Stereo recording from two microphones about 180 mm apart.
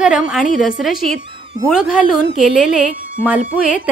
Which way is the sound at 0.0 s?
Centre (ahead or behind).